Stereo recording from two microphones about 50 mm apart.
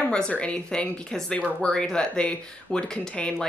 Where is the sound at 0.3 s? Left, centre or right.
Left.